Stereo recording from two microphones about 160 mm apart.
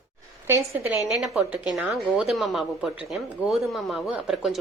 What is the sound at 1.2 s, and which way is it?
Speech, 5° right (ahead or behind).